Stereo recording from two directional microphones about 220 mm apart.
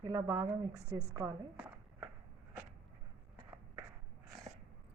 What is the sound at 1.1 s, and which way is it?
Speech, 10° right (ahead or behind).